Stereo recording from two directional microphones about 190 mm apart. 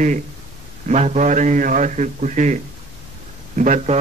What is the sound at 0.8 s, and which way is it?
A man's voice, 35° right (ahead or behind).